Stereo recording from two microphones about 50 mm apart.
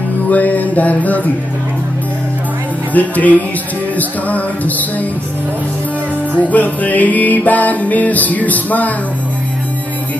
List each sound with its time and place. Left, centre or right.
0.3 s music: left
2.9 s music: left
6.4 s music: left